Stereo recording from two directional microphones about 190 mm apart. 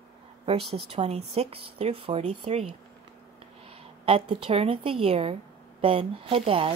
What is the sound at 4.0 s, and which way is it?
Speech, 30° right (ahead or behind).